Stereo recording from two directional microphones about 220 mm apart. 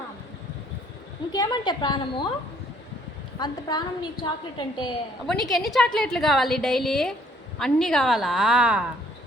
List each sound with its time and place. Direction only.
1.3 s a woman's voice: 20° left (ahead or behind)
3.3 s a woman's voice: 20° left (ahead or behind)
5.2 s a woman's voice: centre (ahead or behind)